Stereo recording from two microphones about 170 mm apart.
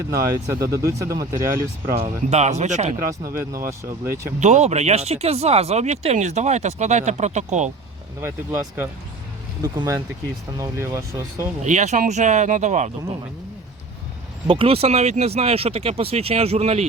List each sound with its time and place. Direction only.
0.1 s speech: 20° right (ahead or behind)
2.3 s speech: 40° right (ahead or behind)
3.7 s speech: 15° right (ahead or behind)
4.4 s speech: 45° right (ahead or behind)
8.2 s speech: 15° right (ahead or behind)
11.6 s speech: 45° right (ahead or behind)
14.4 s speech: 30° right (ahead or behind)